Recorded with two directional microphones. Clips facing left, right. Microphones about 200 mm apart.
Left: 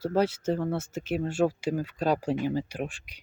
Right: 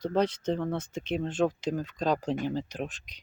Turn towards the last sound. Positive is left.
turn(degrees=10)  # may be behind; listen again after turning